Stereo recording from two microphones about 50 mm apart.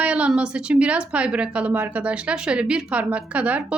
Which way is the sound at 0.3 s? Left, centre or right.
Right.